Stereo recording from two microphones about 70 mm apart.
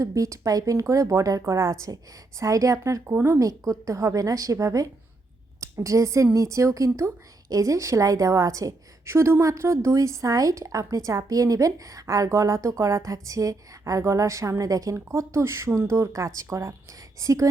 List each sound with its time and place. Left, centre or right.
0.0 s a woman's voice: right
14.9 s speech: right
16.1 s a woman's voice: right